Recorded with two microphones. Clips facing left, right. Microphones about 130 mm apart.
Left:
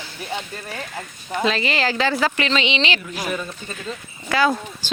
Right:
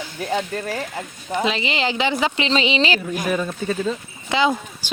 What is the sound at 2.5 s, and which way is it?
Speech, 35° right (ahead or behind).